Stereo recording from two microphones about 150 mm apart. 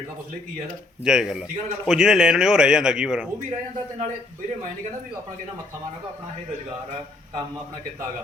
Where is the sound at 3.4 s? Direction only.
60° right (ahead or behind).